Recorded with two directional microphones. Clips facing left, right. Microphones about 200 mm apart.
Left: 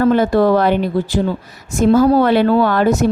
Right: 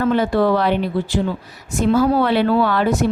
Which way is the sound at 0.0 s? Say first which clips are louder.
Left 4 dB; 45° left (ahead or behind).